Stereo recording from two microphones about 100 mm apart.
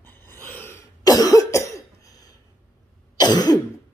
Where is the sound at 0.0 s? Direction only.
25° left (ahead or behind).